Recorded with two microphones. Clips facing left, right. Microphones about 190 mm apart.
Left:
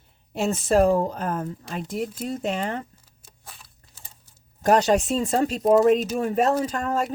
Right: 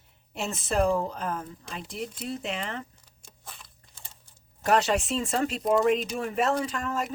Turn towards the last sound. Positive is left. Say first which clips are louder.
# left 5 dB
turn(degrees=35)  # may be behind; listen again after turning